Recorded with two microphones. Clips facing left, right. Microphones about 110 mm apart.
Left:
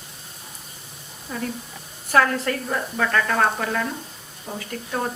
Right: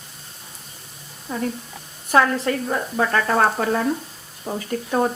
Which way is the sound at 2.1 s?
20° right (ahead or behind).